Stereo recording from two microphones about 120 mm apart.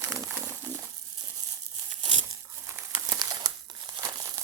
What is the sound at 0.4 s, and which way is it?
Crumpling, 20° right (ahead or behind).